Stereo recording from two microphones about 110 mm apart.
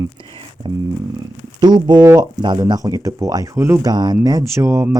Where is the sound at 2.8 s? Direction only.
30° right (ahead or behind).